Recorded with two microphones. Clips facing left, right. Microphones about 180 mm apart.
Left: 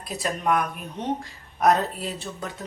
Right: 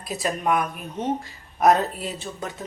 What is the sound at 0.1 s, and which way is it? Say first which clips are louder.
A woman's voice: right 1 dB; 5° right (ahead or behind).